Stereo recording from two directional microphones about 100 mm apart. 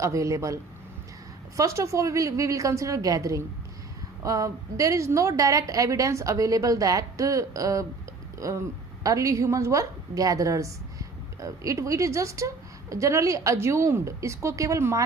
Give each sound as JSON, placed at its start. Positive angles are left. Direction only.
{"t": 0.0, "sound": "a woman's voice", "side_deg": -30}